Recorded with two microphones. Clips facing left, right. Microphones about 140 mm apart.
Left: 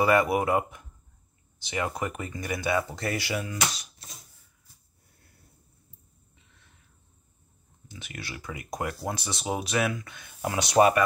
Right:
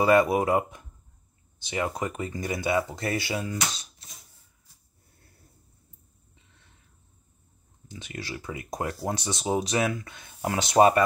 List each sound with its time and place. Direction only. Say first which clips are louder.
0.0 s speech: right 2 dB; 25° right (ahead or behind)
7.9 s speech: right 4 dB; 25° right (ahead or behind)